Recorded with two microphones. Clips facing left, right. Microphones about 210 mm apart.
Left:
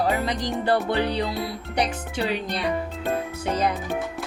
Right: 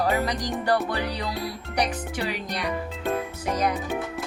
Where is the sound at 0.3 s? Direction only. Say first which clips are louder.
Left 2 dB; 30° left (ahead or behind).